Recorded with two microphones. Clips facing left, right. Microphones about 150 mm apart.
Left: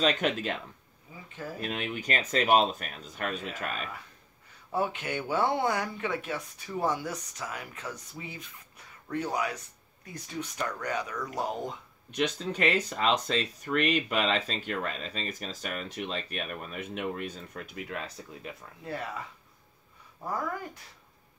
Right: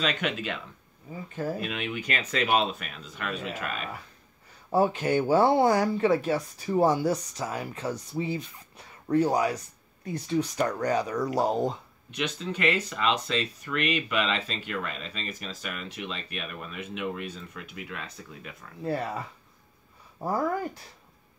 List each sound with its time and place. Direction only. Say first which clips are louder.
0.0 s speech: left 2 dB; 40° left (ahead or behind)
1.1 s speech: right 9 dB; 55° right (ahead or behind)
1.6 s speech: right 1 dB; 40° left (ahead or behind)
4.6 s speech: right 7 dB; 35° right (ahead or behind)
12.1 s speech: left 2 dB; 45° left (ahead or behind)
18.9 s speech: right 6 dB; 35° right (ahead or behind)